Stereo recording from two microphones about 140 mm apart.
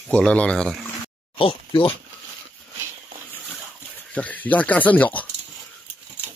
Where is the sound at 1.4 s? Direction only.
40° left (ahead or behind).